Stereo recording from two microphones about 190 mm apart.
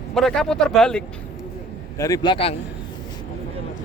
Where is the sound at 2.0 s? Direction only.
20° left (ahead or behind).